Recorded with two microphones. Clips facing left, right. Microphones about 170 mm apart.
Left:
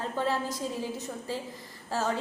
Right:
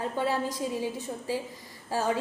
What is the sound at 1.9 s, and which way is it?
Speech, 15° right (ahead or behind).